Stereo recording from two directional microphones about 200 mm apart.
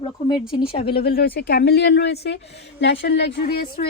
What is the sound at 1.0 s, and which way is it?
A woman's voice, 50° left (ahead or behind).